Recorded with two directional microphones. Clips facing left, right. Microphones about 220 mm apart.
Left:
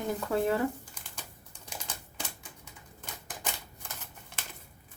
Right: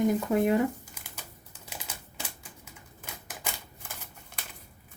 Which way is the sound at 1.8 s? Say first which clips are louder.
Even; 10° right (ahead or behind).